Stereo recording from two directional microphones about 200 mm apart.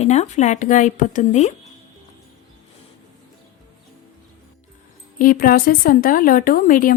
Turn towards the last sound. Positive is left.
turn(degrees=45)  # may be behind; listen again after turning